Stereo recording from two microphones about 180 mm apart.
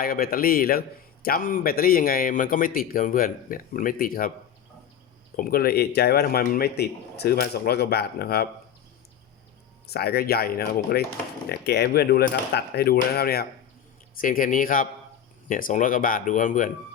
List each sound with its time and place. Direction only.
0.0 s a man's voice: 55° left (ahead or behind)
5.4 s a man's voice: 55° left (ahead or behind)
9.8 s a man's voice: 60° left (ahead or behind)
14.2 s a man's voice: 50° left (ahead or behind)